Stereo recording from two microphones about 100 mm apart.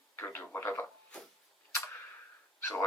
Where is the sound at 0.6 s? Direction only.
20° left (ahead or behind).